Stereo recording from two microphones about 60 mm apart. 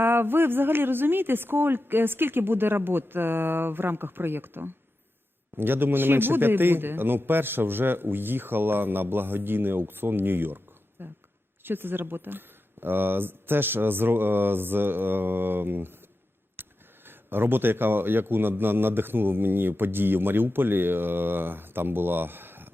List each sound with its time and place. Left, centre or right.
0.0 s a man's voice: right
16.6 s a sound: right
17.1 s a man's voice: right